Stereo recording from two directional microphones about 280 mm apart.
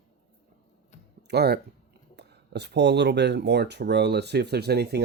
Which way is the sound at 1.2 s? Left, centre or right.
Right.